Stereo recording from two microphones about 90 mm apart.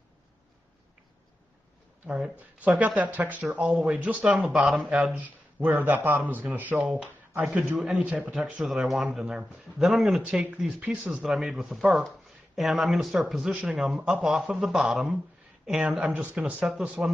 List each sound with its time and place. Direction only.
2.0 s speech: 10° right (ahead or behind)
4.4 s speech: 5° right (ahead or behind)
4.8 s a man's voice: 15° right (ahead or behind)
6.8 s speech: 5° right (ahead or behind)
7.4 s speech: 15° right (ahead or behind)
10.2 s speech: 20° right (ahead or behind)
16.1 s speech: 15° right (ahead or behind)
16.6 s speech: 5° right (ahead or behind)